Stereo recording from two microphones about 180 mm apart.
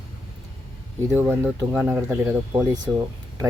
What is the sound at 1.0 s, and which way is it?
Speech, 10° right (ahead or behind).